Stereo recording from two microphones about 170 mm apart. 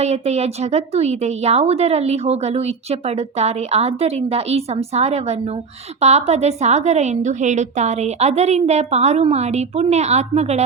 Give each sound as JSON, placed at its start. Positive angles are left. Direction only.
{"t": 0.0, "sound": "speech", "side_deg": -40}